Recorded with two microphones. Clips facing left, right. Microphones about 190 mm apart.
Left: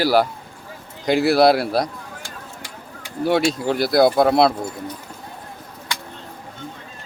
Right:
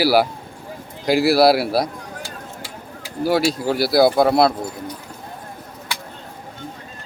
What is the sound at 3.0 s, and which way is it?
Speech, 5° right (ahead or behind).